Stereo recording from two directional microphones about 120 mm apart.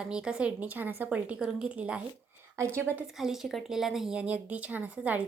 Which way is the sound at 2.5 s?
25° right (ahead or behind).